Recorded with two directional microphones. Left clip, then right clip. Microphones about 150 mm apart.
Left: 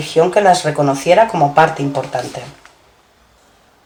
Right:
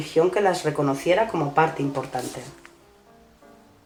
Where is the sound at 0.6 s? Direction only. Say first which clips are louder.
Left 8 dB; 35° right (ahead or behind).